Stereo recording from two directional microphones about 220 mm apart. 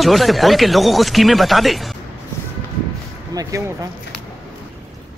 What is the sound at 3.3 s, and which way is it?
Speech, 15° right (ahead or behind).